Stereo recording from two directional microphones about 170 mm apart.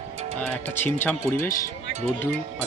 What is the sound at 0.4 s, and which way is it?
Speech, 10° left (ahead or behind).